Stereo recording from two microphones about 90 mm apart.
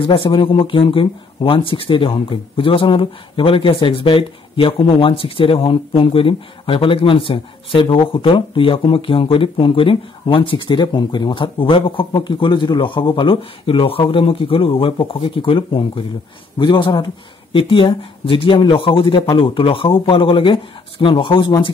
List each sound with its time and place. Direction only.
0.0 s speech: 70° left (ahead or behind)
16.5 s speech: 60° left (ahead or behind)
17.6 s speech: 70° left (ahead or behind)
19.3 s speech: 80° left; by 21.7 s 60° left (ahead or behind)